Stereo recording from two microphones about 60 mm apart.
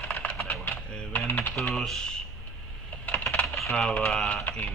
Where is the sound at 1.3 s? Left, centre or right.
Left.